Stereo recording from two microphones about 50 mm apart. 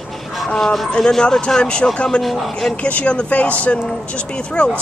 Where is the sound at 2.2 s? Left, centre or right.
Centre.